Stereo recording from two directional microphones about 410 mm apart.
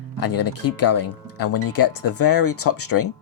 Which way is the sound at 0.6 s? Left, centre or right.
Left.